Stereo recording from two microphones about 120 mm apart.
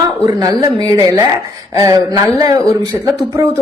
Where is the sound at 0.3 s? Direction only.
35° right (ahead or behind).